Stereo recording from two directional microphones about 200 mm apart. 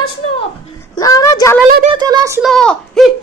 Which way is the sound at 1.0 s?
20° left (ahead or behind).